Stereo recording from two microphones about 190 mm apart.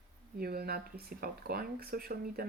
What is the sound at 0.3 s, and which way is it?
Speech, 55° right (ahead or behind).